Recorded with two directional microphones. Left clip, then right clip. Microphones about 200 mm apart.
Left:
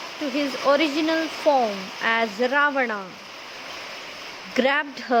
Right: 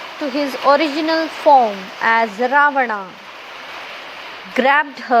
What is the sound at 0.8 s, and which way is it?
Speech, 25° left (ahead or behind).